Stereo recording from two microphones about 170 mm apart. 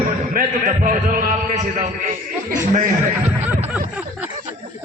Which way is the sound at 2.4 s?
50° right (ahead or behind).